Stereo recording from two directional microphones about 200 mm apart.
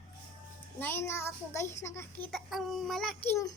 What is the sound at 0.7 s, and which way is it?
A child's voice, 10° left (ahead or behind).